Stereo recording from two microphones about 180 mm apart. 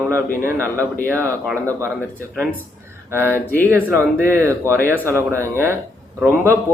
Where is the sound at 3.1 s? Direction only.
15° right (ahead or behind).